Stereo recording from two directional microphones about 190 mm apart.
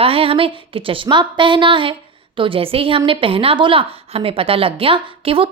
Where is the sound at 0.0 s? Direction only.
30° right (ahead or behind).